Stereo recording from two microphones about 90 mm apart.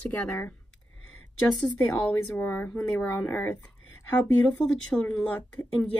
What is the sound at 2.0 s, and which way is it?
Speech, 15° left (ahead or behind).